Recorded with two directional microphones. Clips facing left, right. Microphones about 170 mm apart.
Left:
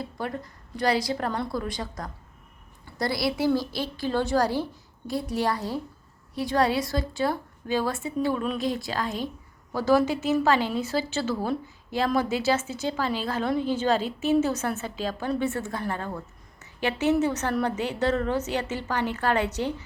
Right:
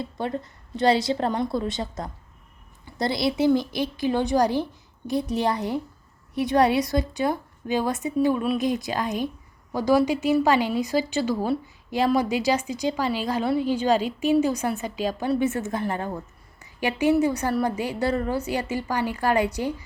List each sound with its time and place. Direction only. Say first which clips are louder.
0.0 s a woman's voice: right 3 dB; 25° right (ahead or behind)